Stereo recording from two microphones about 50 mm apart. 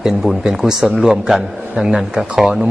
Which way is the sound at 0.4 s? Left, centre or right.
Centre.